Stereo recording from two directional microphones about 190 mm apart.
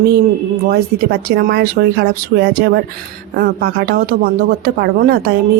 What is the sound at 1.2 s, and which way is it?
Speech, 55° right (ahead or behind).